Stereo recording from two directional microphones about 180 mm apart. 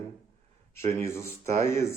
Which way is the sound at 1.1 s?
15° left (ahead or behind).